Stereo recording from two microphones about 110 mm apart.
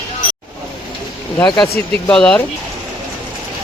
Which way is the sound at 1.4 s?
35° left (ahead or behind).